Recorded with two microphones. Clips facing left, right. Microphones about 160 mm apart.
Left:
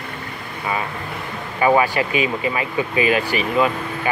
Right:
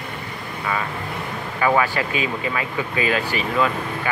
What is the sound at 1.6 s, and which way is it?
Speech, 20° left (ahead or behind).